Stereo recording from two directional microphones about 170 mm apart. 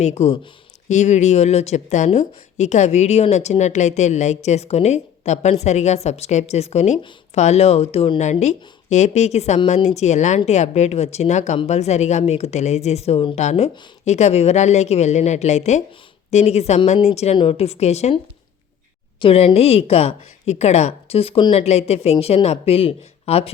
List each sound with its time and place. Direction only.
0.0 s speech: 40° left (ahead or behind)
19.2 s speech: 30° left (ahead or behind)